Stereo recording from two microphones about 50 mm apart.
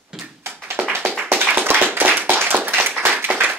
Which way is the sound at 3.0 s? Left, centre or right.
Right.